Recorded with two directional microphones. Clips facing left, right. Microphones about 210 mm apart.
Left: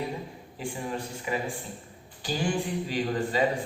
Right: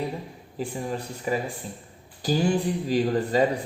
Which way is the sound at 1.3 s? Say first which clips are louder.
Right 4 dB; 40° right (ahead or behind).